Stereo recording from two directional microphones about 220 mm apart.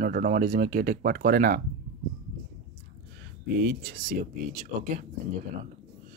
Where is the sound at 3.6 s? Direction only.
40° right (ahead or behind).